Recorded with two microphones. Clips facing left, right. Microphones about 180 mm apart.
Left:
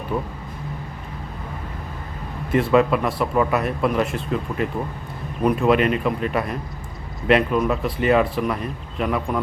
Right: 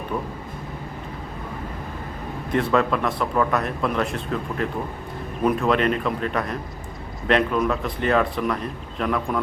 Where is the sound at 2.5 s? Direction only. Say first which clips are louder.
Left 4 dB; 5° left (ahead or behind).